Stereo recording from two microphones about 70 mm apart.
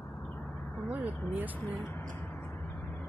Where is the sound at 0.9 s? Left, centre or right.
Right.